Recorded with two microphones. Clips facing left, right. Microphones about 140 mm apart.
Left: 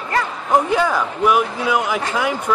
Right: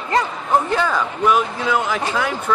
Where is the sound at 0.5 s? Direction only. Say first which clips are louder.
Left 2 dB; 10° left (ahead or behind).